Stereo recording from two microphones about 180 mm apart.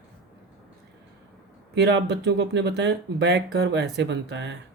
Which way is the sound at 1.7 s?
75° right (ahead or behind).